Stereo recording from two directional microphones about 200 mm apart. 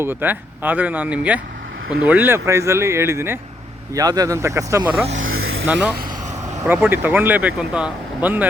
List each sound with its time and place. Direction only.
0.0 s speech: 10° right (ahead or behind)
5.1 s vehicle: 85° right
5.6 s speech: 10° right (ahead or behind)